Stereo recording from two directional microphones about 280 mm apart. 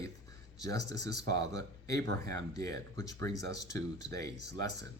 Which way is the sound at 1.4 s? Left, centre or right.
Centre.